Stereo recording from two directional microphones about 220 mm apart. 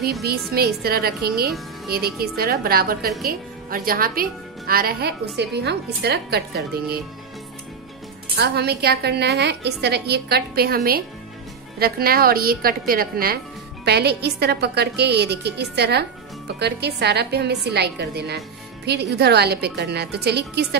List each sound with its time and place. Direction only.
0.2 s a woman's voice: 45° right (ahead or behind)
8.4 s a woman's voice: 45° right (ahead or behind)